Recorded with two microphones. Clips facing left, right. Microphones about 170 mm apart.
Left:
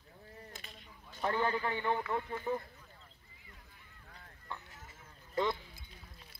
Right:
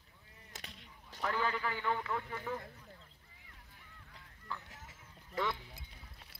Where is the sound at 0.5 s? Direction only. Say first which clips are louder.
Left 1 dB; 85° right.